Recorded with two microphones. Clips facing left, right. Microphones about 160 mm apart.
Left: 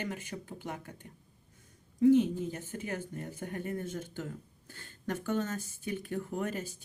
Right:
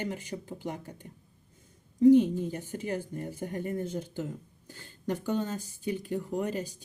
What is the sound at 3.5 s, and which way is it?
Speech, 30° right (ahead or behind).